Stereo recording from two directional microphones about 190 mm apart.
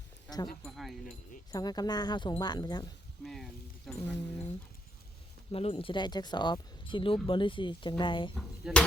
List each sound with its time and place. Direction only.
0.6 s speech: centre (ahead or behind)
1.5 s speech: 20° left (ahead or behind)
3.2 s speech: centre (ahead or behind)
3.9 s speech: 15° left (ahead or behind)
5.5 s speech: 30° left (ahead or behind)
8.4 s speech: centre (ahead or behind)